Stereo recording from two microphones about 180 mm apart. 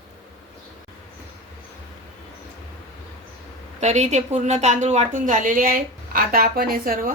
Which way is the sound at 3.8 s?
40° right (ahead or behind).